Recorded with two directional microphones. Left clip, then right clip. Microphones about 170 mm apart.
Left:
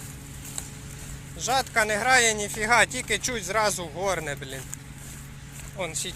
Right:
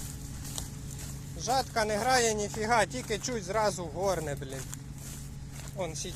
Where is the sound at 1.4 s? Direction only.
Centre (ahead or behind).